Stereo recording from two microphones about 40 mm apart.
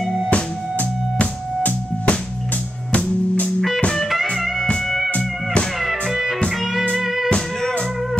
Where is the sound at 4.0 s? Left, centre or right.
Centre.